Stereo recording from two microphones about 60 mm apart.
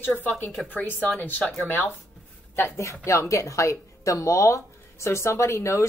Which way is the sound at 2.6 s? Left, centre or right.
Left.